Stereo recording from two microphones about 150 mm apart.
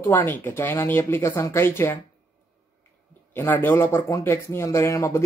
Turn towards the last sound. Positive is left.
turn(degrees=20)  # may be behind; listen again after turning